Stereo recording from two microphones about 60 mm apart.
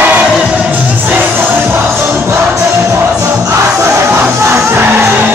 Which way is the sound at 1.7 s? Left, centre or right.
Right.